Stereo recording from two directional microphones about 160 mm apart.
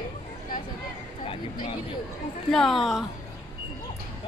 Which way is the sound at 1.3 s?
30° left (ahead or behind).